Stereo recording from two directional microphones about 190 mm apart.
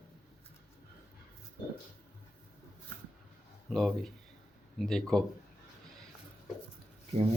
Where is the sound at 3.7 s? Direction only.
Centre (ahead or behind).